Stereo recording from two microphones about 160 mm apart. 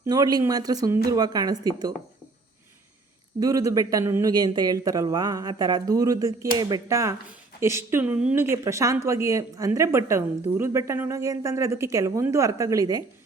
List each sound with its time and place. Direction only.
0.0 s speech: 25° right (ahead or behind)
3.4 s speech: 20° right (ahead or behind)